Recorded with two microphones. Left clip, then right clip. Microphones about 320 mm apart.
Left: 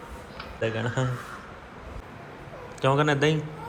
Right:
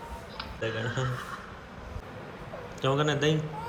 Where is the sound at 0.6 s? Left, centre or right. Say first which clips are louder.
Left 4 dB; right.